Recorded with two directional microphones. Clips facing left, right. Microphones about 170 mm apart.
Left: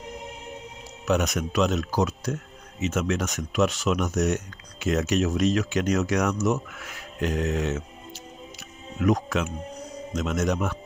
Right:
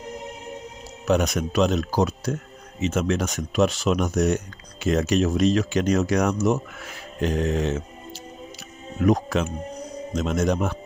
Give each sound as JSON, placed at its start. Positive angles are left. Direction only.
{"t": 1.0, "sound": "speech", "side_deg": -35}